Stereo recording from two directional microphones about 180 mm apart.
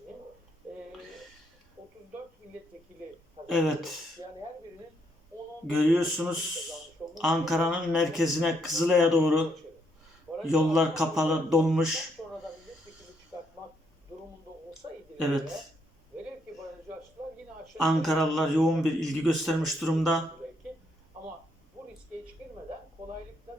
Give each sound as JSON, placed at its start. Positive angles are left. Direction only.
{"t": 3.4, "sound": "speech", "side_deg": 0}
{"t": 5.6, "sound": "a man's voice", "side_deg": 0}
{"t": 17.8, "sound": "a man's voice", "side_deg": 0}
{"t": 23.0, "sound": "a sound", "side_deg": -35}